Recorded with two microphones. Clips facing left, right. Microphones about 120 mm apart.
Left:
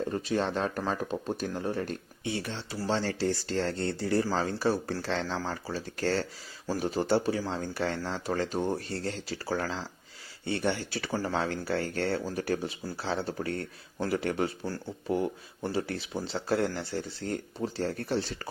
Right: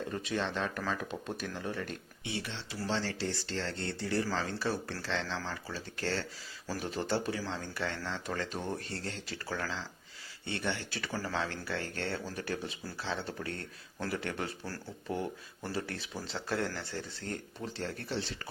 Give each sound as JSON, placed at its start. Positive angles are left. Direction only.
{"t": 0.1, "sound": "speech", "side_deg": 35}